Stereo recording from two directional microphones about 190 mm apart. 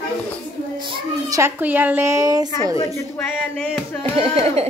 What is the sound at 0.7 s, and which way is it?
Speech, 25° right (ahead or behind).